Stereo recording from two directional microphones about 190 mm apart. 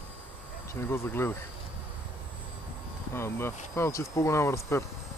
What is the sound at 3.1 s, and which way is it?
Speech, 15° left (ahead or behind).